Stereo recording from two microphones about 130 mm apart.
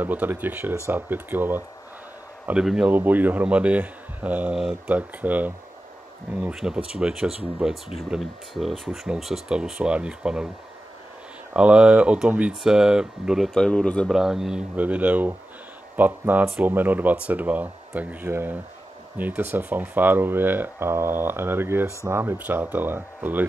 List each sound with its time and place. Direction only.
0.0 s speech: 15° right (ahead or behind)
6.5 s speech: 5° right (ahead or behind)
11.5 s speech: 10° right (ahead or behind)